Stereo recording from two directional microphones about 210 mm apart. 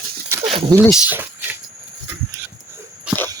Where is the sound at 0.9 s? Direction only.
10° right (ahead or behind).